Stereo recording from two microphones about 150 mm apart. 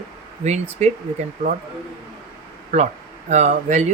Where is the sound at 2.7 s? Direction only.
45° right (ahead or behind).